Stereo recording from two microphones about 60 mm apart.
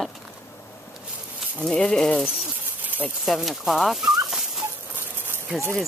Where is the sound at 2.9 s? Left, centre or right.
Right.